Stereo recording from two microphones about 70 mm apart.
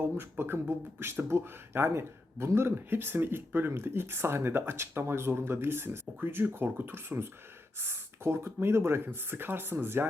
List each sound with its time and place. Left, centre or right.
0.0 s speech: right